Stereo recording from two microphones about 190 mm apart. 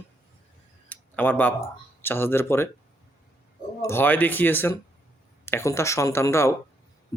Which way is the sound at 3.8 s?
10° left (ahead or behind).